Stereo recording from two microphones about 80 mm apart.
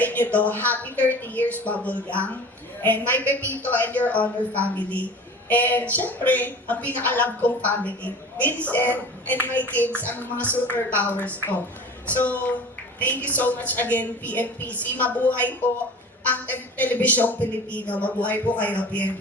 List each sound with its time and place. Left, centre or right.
0.0 s a woman's voice: left